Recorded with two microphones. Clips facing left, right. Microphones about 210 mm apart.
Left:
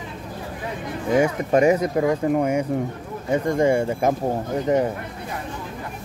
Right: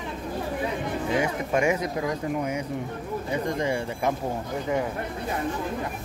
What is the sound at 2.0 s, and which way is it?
Speech, 55° left (ahead or behind).